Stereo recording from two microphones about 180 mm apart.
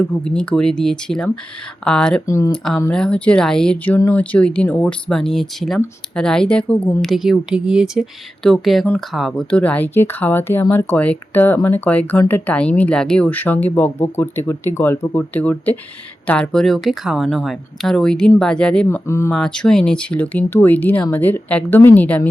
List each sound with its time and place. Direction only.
0.3 s speech: 5° left (ahead or behind)
2.2 s speech: 15° left (ahead or behind)
2.5 s speech: centre (ahead or behind)
19.3 s speech: 5° left (ahead or behind)